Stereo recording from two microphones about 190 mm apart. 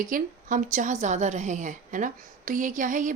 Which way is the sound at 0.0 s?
45° right (ahead or behind).